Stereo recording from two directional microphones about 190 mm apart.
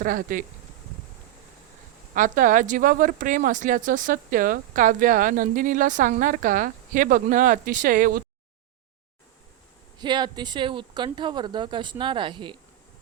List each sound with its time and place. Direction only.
0.0 s a woman's voice: 45° right (ahead or behind)
2.1 s a woman's voice: 45° right (ahead or behind)
10.0 s speech: 25° right (ahead or behind)